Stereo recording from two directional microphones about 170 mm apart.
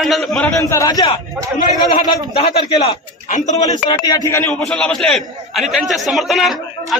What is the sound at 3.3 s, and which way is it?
Speech, 45° left (ahead or behind).